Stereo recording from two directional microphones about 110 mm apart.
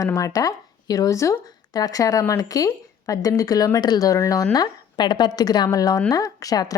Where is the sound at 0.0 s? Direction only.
30° left (ahead or behind).